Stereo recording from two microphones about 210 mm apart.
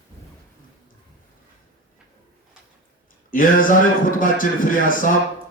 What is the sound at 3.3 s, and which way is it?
A man's voice, 40° left (ahead or behind).